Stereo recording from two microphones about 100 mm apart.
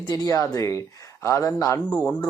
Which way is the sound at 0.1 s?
35° left (ahead or behind).